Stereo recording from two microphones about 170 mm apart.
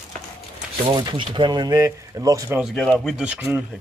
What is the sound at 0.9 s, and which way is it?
Speech, 30° right (ahead or behind).